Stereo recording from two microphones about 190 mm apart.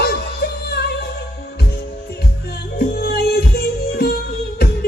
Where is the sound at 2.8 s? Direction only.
55° left (ahead or behind).